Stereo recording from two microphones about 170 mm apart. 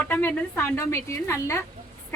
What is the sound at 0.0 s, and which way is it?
A woman's voice, 10° left (ahead or behind).